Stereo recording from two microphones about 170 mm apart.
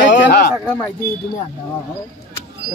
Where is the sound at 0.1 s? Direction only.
70° left (ahead or behind).